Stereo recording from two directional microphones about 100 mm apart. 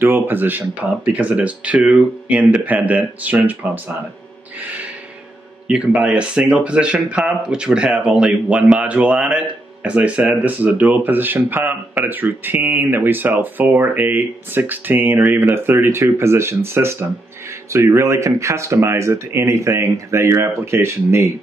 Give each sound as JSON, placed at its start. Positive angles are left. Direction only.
{"t": 0.0, "sound": "speech", "side_deg": -20}
{"t": 5.7, "sound": "speech", "side_deg": -10}